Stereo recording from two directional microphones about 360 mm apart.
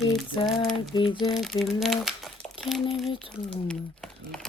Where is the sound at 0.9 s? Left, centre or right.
Centre.